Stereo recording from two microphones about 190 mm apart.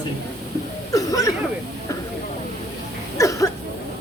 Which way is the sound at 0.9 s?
15° left (ahead or behind).